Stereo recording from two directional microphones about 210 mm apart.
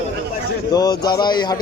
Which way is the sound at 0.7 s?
20° left (ahead or behind).